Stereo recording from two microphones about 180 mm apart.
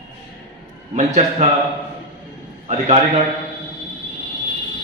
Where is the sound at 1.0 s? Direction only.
40° right (ahead or behind).